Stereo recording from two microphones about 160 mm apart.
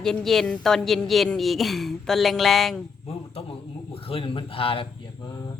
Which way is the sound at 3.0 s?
35° left (ahead or behind).